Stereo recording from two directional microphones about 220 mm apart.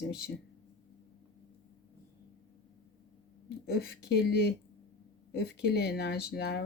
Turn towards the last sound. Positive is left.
turn(degrees=45)  # may be behind; listen again after turning